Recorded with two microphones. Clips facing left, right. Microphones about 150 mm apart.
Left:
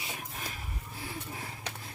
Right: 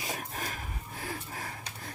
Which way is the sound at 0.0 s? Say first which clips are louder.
Right 4 dB; 40° right (ahead or behind).